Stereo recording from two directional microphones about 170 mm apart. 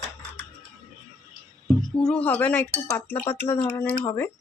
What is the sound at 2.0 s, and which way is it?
Speech, 5° left (ahead or behind).